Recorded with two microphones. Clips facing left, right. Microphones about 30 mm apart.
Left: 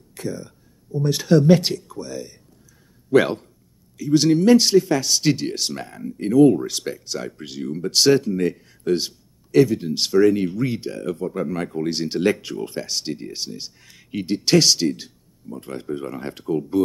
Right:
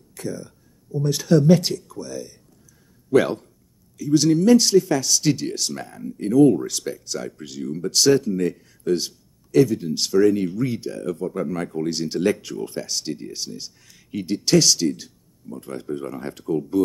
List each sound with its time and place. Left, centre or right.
0.1 s speech: left